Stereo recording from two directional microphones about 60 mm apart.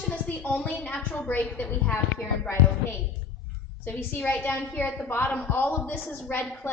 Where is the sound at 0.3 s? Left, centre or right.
Left.